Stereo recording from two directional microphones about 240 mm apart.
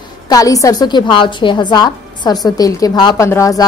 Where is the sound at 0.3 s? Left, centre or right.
Centre.